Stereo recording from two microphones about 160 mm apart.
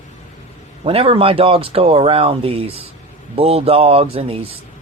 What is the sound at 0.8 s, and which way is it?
Speech, 35° right (ahead or behind).